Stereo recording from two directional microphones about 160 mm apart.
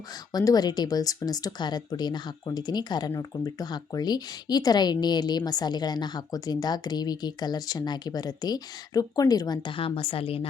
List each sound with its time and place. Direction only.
0.3 s speech: 25° left (ahead or behind)